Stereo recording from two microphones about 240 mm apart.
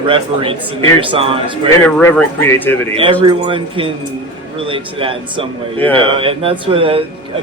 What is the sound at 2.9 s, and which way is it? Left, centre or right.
A man's voice, right.